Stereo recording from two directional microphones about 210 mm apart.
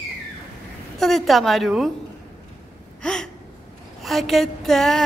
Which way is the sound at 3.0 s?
5° left (ahead or behind).